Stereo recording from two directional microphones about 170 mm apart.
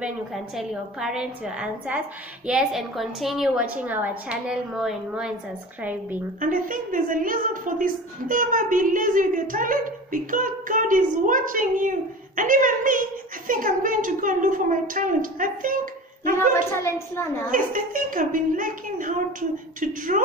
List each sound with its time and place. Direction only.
0.0 s a woman's voice: 5° right (ahead or behind)
6.4 s a woman's voice: 50° right (ahead or behind)
16.3 s a woman's voice: 15° left (ahead or behind)
17.5 s a woman's voice: 55° right (ahead or behind)